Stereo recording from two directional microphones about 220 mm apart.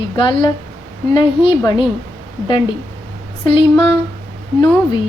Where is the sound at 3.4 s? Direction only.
25° left (ahead or behind).